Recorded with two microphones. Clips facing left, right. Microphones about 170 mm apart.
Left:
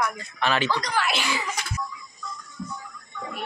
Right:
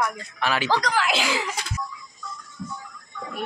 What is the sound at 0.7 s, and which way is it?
Speech, 90° right.